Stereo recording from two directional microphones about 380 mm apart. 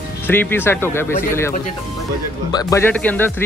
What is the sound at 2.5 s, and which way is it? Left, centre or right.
Speech, centre.